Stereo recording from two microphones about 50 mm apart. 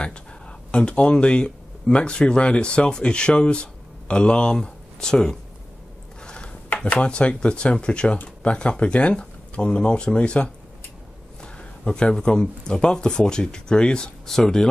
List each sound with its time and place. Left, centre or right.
0.0 s speech: left